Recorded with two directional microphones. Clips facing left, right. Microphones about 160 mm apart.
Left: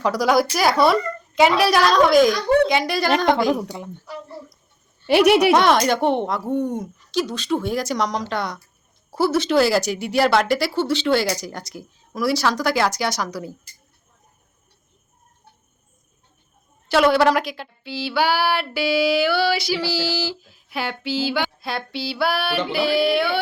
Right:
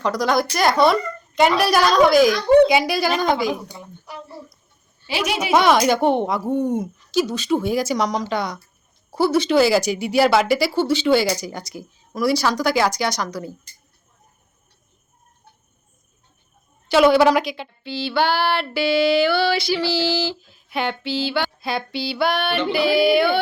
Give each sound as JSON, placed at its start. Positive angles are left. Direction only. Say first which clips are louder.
{"t": 0.0, "sound": "female singing", "louder": "left 2 dB", "side_deg": 5}
{"t": 3.3, "sound": "a woman's voice", "louder": "left 3 dB", "side_deg": 65}
{"t": 5.0, "sound": "a woman's voice", "louder": "left 10 dB", "side_deg": 60}
{"t": 5.5, "sound": "female singing", "louder": "even", "side_deg": 0}
{"t": 16.9, "sound": "female singing", "louder": "right 2 dB", "side_deg": 0}